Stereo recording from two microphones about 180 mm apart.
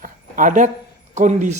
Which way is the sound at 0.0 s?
45° right (ahead or behind).